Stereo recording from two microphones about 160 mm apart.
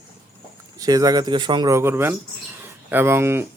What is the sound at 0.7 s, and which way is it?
Speech, 25° right (ahead or behind).